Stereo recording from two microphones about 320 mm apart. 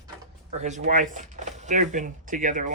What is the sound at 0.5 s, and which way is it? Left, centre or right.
Speech, right.